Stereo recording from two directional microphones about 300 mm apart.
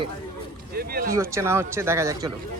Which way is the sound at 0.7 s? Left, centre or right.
Right.